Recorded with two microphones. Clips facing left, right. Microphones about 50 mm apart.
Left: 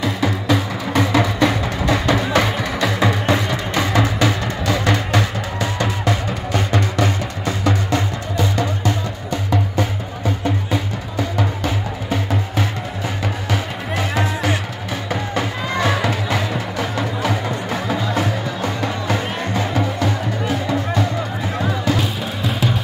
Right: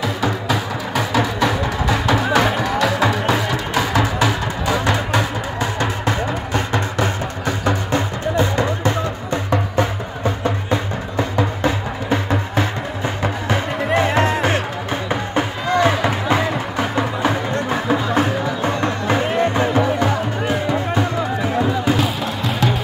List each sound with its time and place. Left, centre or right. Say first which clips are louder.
0.0 s music: even; centre
5.1 s music: even; right